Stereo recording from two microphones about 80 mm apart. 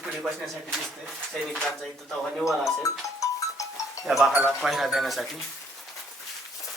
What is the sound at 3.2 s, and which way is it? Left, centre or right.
Music, left.